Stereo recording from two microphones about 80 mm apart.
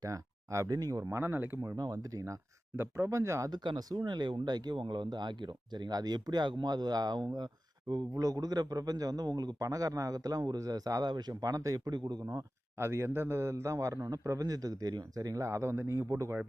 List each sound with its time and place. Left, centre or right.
0.0 s a man's voice: right
1.1 s speech: right
1.7 s a man's voice: right
2.7 s a man's voice: right
3.5 s speech: right
8.1 s a man's voice: right
11.1 s a man's voice: right
11.9 s speech: right
12.8 s a man's voice: right